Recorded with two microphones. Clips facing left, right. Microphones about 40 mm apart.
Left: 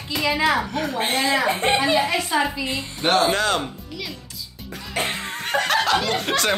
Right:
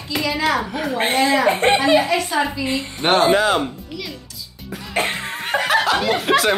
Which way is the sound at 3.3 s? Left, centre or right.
Centre.